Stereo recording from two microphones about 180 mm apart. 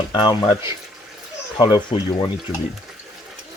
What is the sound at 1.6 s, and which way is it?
Speech, 25° left (ahead or behind).